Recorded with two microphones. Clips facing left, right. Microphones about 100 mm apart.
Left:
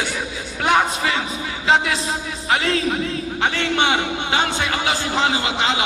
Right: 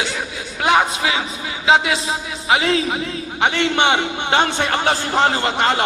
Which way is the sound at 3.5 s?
55° right (ahead or behind).